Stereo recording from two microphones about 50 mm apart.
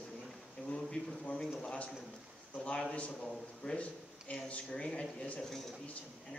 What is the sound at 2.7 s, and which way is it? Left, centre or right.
A man's voice, left.